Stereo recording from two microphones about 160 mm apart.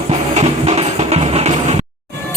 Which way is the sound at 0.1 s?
45° right (ahead or behind).